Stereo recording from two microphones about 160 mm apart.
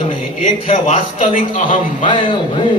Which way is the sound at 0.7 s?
45° left (ahead or behind).